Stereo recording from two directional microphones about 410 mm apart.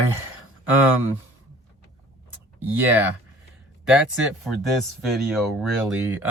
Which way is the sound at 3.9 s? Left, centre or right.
Centre.